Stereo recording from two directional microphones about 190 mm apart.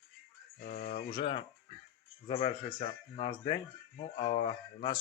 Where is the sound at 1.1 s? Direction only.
25° left (ahead or behind).